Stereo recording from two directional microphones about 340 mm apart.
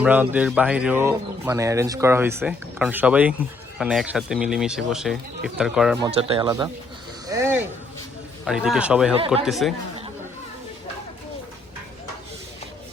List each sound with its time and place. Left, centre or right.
0.0 s speech: centre
6.0 s speech: centre
7.3 s a sound: centre
8.4 s speech: centre
9.1 s speech: centre
9.4 s speech: centre